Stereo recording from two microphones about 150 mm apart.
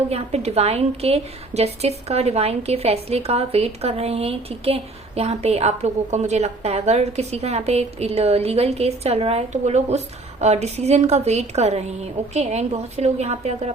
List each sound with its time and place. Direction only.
0.1 s a woman's voice: 45° right (ahead or behind)